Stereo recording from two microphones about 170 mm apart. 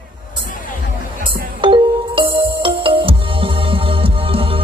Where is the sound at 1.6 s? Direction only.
30° right (ahead or behind).